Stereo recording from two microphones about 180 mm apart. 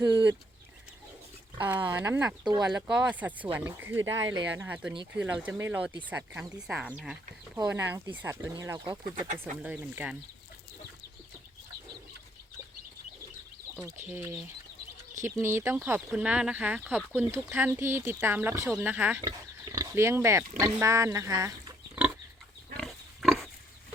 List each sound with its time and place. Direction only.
0.0 s speech: 10° right (ahead or behind)
1.6 s speech: 10° right (ahead or behind)
9.4 s speech: 10° right (ahead or behind)
14.1 s speech: 15° right (ahead or behind)
19.2 s speech: 20° right (ahead or behind)
22.8 s pig: centre (ahead or behind)